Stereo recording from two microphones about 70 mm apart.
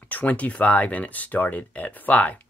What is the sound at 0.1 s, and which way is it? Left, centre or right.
Speech, left.